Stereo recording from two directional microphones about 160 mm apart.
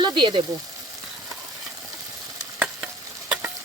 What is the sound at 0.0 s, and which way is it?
Speech, 30° right (ahead or behind).